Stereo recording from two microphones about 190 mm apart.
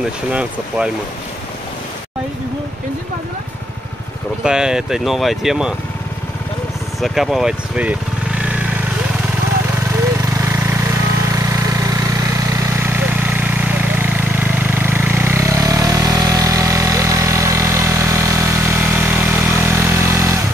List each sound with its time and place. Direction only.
0.3 s speech: 5° right (ahead or behind)
4.4 s speech: 5° right (ahead or behind)
7.0 s speech: centre (ahead or behind)
14.4 s vehicle: 10° right (ahead or behind)